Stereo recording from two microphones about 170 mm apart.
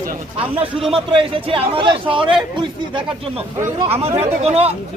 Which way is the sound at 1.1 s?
30° right (ahead or behind).